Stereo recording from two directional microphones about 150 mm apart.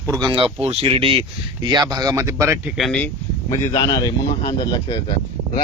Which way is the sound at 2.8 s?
5° left (ahead or behind).